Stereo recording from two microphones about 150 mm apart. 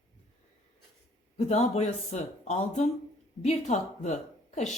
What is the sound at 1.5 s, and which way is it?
Speech, 50° left (ahead or behind).